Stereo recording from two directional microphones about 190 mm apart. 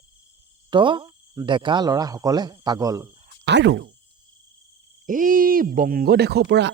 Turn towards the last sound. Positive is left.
turn(degrees=-65)  # may be behind; listen again after turning